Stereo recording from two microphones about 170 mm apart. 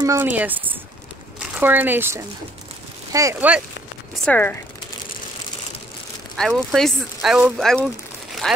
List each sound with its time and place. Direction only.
0.0 s speech: 15° right (ahead or behind)
4.2 s speech: 10° left (ahead or behind)
6.3 s speech: centre (ahead or behind)